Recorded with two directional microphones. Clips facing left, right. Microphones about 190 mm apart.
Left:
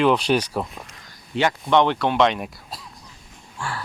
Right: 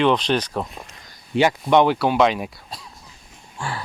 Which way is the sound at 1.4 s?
10° right (ahead or behind).